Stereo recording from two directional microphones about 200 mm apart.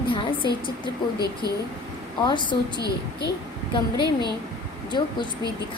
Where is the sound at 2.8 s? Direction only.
55° left (ahead or behind).